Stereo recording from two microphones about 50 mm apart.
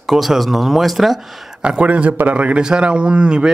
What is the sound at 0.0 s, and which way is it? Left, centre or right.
Speech, centre.